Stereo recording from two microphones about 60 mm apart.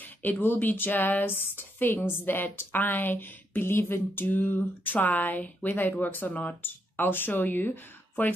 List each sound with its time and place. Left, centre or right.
0.0 s speech: left